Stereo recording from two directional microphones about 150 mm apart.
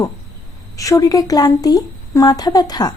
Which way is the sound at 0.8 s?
25° left (ahead or behind).